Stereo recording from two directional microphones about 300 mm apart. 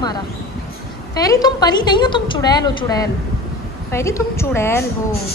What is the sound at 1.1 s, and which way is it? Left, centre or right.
A woman's voice, centre.